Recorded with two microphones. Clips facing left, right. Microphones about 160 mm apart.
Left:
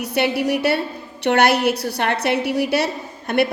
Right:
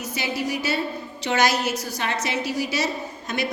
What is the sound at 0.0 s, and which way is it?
A woman's voice, 65° left (ahead or behind).